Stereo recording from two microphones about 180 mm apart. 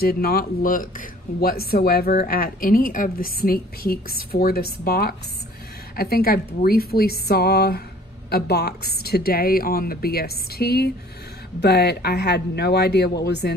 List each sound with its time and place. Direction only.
0.0 s a man's voice: 55° left (ahead or behind)